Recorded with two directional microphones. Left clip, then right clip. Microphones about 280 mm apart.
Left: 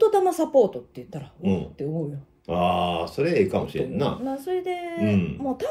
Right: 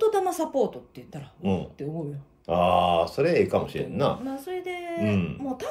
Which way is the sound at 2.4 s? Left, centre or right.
Centre.